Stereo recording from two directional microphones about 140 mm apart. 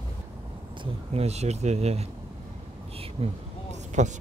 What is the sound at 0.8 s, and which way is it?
Speech, 45° right (ahead or behind).